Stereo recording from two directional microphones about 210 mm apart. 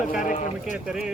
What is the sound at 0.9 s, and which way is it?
Speech, 5° right (ahead or behind).